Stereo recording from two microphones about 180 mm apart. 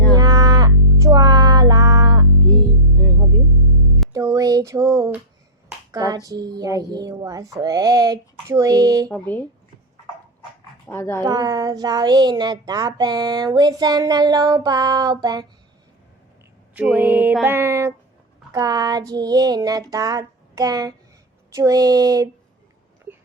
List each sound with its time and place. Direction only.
0.1 s cattle: 20° right (ahead or behind)
3.0 s music: 10° left (ahead or behind)
4.1 s a sound: 20° right (ahead or behind)
5.9 s speech: 20° right (ahead or behind)
9.0 s speech: 10° left (ahead or behind)
10.8 s speech: 15° left (ahead or behind)
11.2 s speech: 20° right (ahead or behind)
16.7 s a sound: 5° right (ahead or behind)
18.5 s speech: 20° right (ahead or behind)